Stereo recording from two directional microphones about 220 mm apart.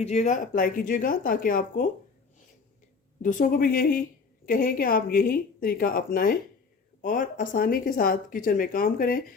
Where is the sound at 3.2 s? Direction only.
35° left (ahead or behind).